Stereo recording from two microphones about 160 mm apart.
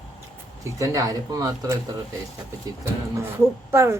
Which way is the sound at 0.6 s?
20° right (ahead or behind).